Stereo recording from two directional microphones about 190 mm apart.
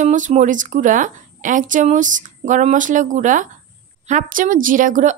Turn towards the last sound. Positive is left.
turn(degrees=-45)  # may be behind; listen again after turning